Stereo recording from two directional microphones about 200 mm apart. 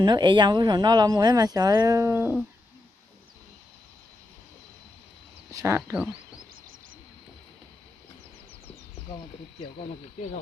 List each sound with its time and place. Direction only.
0.0 s speech: 20° right (ahead or behind)
5.5 s speech: 15° right (ahead or behind)